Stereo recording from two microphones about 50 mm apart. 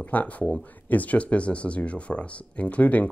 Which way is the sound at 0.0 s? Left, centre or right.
Left.